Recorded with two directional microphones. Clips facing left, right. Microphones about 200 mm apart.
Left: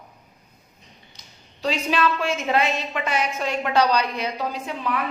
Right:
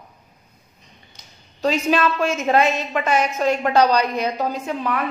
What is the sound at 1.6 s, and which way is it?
A woman's voice, 45° right (ahead or behind).